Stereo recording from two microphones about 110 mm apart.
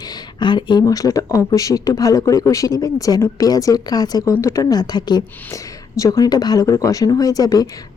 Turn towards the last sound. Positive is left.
turn(degrees=35)  # may be behind; listen again after turning